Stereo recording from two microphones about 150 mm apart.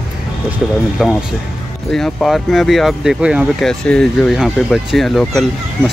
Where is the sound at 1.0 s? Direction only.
5° right (ahead or behind).